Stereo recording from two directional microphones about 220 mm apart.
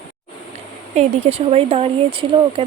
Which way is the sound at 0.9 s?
30° right (ahead or behind).